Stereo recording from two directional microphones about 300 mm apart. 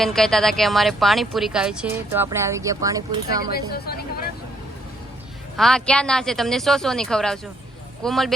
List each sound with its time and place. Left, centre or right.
0.0 s a woman's voice: centre
3.5 s a sound: left
5.5 s a woman's voice: centre